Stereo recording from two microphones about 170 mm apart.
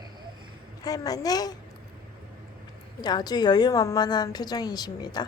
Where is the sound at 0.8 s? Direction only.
20° left (ahead or behind).